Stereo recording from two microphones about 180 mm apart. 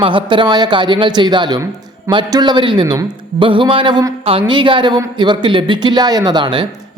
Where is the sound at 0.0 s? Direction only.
30° right (ahead or behind).